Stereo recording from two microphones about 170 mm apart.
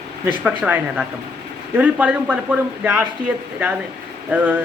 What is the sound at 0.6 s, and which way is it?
Speech, 10° right (ahead or behind).